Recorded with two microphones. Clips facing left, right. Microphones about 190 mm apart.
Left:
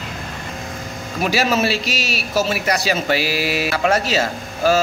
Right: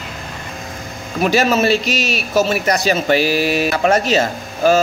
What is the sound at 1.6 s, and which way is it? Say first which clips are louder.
Speech: right 5 dB; 50° right (ahead or behind).